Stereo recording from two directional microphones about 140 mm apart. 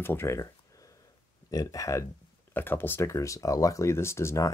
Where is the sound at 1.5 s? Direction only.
25° left (ahead or behind).